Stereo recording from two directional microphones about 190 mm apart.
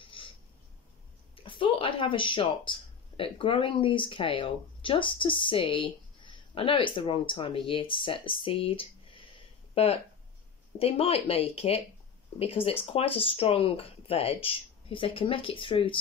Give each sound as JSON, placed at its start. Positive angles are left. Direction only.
{"t": 0.2, "sound": "a sound", "side_deg": 25}
{"t": 1.3, "sound": "speech", "side_deg": 30}
{"t": 10.8, "sound": "speech", "side_deg": 30}